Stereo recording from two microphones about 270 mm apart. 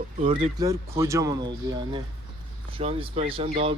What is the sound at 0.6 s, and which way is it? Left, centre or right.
Speech, centre.